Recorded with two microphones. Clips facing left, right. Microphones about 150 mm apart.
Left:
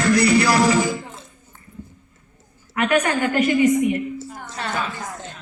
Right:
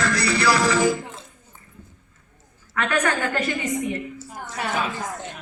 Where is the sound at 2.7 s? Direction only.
15° left (ahead or behind).